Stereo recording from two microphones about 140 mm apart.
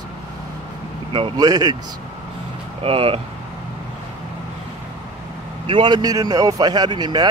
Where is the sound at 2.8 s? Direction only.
40° right (ahead or behind).